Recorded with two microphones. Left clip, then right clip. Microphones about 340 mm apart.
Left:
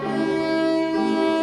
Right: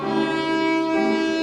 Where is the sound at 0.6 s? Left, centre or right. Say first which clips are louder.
Right 1 dB; centre.